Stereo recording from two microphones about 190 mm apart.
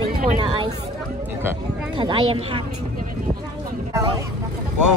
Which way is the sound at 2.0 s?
25° right (ahead or behind).